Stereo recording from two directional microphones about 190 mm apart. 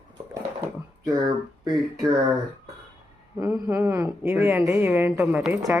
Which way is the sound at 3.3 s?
15° right (ahead or behind).